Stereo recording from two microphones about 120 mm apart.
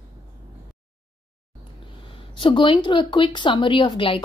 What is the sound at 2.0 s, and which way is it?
A woman's voice, 45° left (ahead or behind).